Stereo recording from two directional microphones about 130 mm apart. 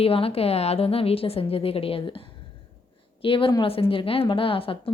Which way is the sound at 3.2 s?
40° left (ahead or behind).